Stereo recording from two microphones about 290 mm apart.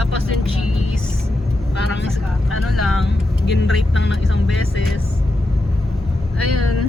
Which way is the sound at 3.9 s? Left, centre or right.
Left.